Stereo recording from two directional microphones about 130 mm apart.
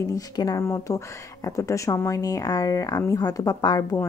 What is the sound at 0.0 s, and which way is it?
Speech, 25° left (ahead or behind).